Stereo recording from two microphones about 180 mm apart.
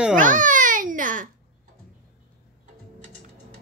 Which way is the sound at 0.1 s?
45° right (ahead or behind).